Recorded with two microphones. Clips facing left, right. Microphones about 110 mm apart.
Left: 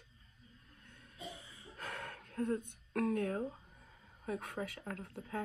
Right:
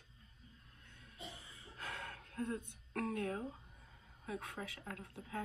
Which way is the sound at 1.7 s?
60° left (ahead or behind).